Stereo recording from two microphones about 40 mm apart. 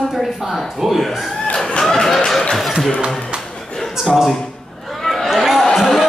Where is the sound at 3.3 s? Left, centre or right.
Right.